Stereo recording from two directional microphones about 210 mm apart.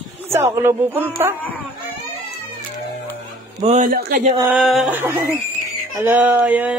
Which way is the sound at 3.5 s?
30° right (ahead or behind).